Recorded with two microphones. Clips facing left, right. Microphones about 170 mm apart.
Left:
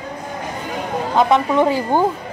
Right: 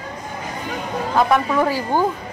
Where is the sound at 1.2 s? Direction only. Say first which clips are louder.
Left 2 dB; 20° left (ahead or behind).